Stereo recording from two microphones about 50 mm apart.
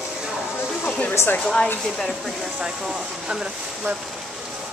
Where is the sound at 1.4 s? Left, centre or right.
Centre.